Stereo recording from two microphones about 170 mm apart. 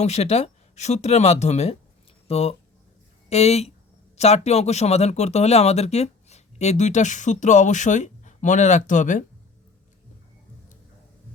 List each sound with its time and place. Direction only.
0.0 s speech: 40° left (ahead or behind)